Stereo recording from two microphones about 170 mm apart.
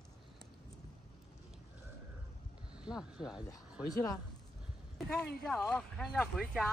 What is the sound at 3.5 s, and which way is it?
Speech, 20° left (ahead or behind).